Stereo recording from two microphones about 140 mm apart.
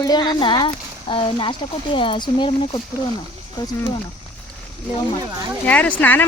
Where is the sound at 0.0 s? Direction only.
30° left (ahead or behind).